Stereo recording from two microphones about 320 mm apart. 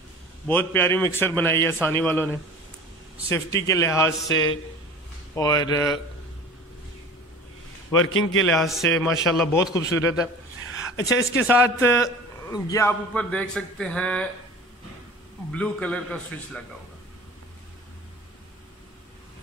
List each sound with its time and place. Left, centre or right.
0.5 s a man's voice: centre
5.3 s a man's voice: centre
8.0 s a man's voice: left
8.5 s a man's voice: centre
15.5 s a man's voice: centre